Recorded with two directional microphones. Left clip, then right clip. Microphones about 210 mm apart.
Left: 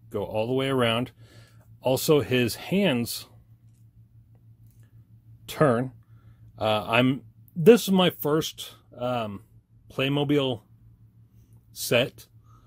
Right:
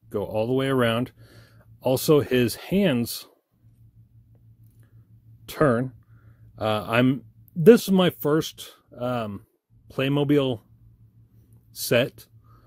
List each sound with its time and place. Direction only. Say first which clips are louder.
0.1 s speech: right 2 dB; 30° right (ahead or behind)
5.4 s speech: right 1 dB; 30° right (ahead or behind)
11.7 s a sound: right 1 dB; 35° right (ahead or behind)